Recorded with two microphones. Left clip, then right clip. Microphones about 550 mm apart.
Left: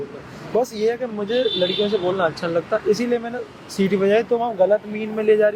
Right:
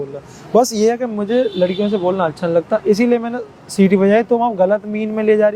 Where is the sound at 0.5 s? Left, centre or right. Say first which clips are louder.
Right 7 dB; right.